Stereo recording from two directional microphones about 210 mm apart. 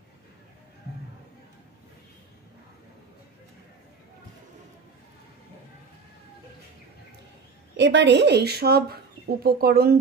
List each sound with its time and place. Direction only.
7.7 s speech: 55° right (ahead or behind)